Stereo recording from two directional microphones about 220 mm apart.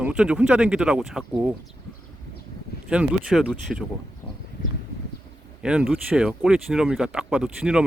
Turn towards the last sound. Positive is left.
turn(degrees=-5)  # may be behind; listen again after turning